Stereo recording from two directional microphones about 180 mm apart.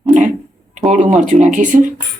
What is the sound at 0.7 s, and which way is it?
Speech, 40° right (ahead or behind).